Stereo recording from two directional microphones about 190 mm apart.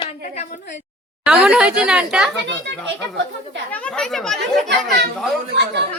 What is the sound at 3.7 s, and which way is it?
Speech, 5° left (ahead or behind).